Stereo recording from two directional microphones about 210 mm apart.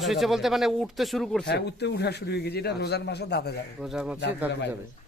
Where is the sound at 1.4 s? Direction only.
55° left (ahead or behind).